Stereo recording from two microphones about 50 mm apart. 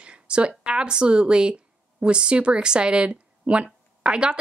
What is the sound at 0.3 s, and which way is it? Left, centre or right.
A woman's voice, centre.